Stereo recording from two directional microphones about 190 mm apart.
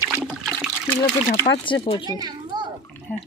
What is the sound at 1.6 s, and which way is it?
Speech, 30° left (ahead or behind).